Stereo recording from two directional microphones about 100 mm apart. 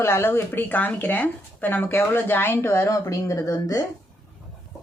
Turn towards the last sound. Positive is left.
turn(degrees=40)  # may be behind; listen again after turning